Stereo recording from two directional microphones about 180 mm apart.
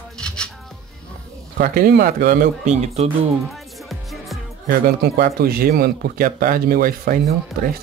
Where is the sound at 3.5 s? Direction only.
Centre (ahead or behind).